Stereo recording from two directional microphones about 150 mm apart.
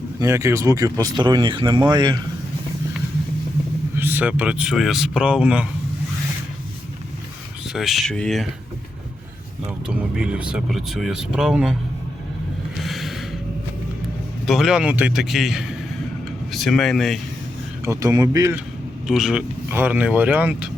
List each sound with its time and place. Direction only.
0.2 s speech: 20° right (ahead or behind)
3.9 s speech: 15° right (ahead or behind)
7.7 s speech: centre (ahead or behind)
9.6 s speech: 5° right (ahead or behind)
12.8 s a sound: centre (ahead or behind)
14.4 s speech: centre (ahead or behind)
17.8 s speech: 20° right (ahead or behind)
19.0 s speech: 5° right (ahead or behind)